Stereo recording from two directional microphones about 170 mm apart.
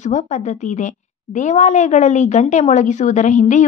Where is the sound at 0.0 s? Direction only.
45° left (ahead or behind).